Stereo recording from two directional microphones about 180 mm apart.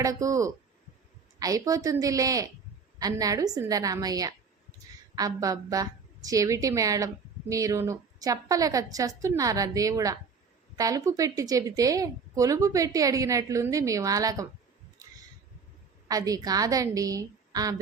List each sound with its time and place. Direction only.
0.0 s a woman's voice: 20° right (ahead or behind)
16.0 s a woman's voice: 20° right (ahead or behind)